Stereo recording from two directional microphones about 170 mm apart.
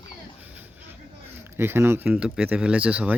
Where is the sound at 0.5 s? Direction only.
10° right (ahead or behind).